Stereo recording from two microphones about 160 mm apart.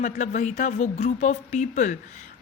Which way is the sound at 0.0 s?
50° left (ahead or behind).